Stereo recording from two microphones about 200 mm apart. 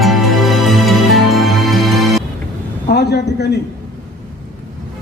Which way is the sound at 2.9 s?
55° left (ahead or behind).